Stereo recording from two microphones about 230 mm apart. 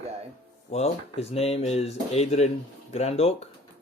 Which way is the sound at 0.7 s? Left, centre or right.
Left.